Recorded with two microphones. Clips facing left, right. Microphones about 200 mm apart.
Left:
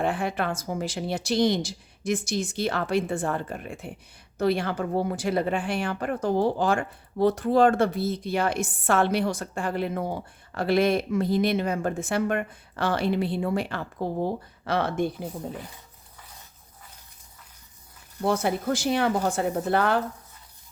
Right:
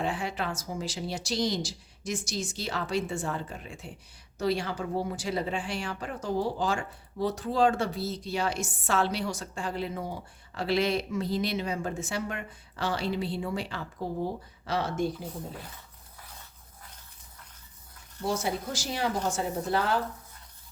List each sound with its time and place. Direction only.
0.0 s speech: 55° left (ahead or behind)
18.2 s speech: 60° left (ahead or behind)